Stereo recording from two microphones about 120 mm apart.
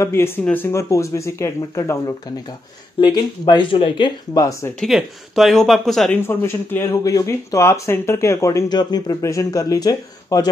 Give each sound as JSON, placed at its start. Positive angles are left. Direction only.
{"t": 0.0, "sound": "speech", "side_deg": 20}
{"t": 3.0, "sound": "speech", "side_deg": 35}
{"t": 4.7, "sound": "speech", "side_deg": 0}
{"t": 6.2, "sound": "speech", "side_deg": 20}